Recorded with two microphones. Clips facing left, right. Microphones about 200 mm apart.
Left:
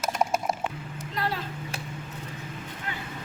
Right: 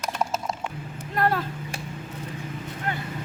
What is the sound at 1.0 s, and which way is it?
Vehicle, 55° right (ahead or behind).